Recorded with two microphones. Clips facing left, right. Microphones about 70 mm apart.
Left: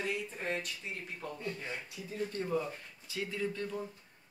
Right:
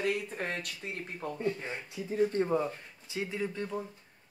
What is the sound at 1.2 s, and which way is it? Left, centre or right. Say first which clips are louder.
Speech: right 8 dB; right.